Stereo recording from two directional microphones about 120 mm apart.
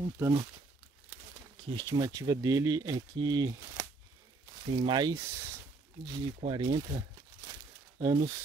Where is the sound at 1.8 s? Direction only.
30° right (ahead or behind).